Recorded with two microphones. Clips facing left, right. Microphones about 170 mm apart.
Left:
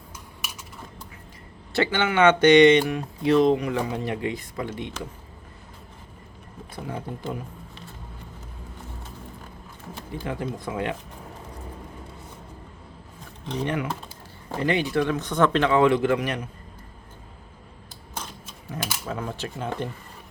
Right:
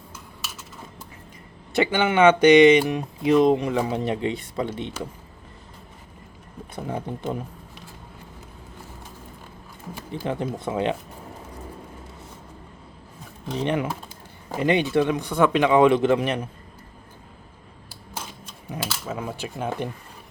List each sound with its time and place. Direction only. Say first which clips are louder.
1.7 s speech: right 2 dB; 15° right (ahead or behind)
3.5 s speech: right 2 dB; 25° right (ahead or behind)
6.7 s speech: right 3 dB; 25° right (ahead or behind)
10.2 s speech: right 4 dB; 25° right (ahead or behind)
13.6 s speech: right 3 dB; 20° right (ahead or behind)
18.1 s typewriter: even; 5° right (ahead or behind)
19.0 s speech: even; 5° right (ahead or behind)